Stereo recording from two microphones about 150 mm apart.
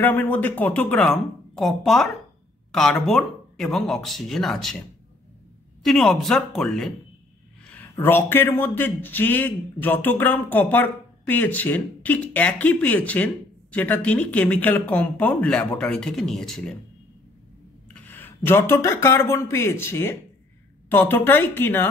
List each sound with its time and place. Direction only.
0.0 s speech: 15° left (ahead or behind)
5.9 s speech: centre (ahead or behind)
8.0 s a man's voice: 15° left (ahead or behind)
17.9 s a man's voice: 10° left (ahead or behind)